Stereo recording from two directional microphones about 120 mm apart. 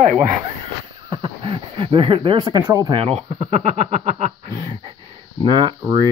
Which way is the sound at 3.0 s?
55° right (ahead or behind).